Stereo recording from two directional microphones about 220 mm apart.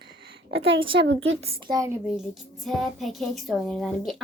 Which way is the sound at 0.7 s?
25° right (ahead or behind).